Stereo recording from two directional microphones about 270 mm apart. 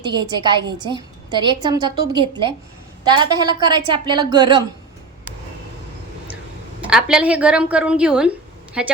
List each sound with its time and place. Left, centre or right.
0.0 s a woman's voice: centre
6.8 s a woman's voice: centre